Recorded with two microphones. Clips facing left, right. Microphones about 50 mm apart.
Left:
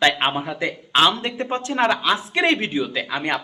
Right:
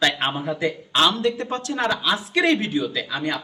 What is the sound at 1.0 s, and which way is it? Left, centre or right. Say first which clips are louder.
Speech: even; left.